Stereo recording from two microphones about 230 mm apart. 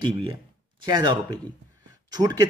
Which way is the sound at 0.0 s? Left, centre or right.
Right.